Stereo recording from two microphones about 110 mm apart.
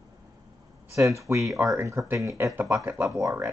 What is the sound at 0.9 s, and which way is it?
Speech, 30° right (ahead or behind).